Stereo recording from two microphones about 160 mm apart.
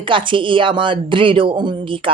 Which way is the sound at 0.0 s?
30° right (ahead or behind).